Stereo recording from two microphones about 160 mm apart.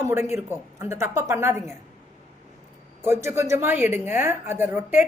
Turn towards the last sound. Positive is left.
turn(degrees=-15)  # may be behind; listen again after turning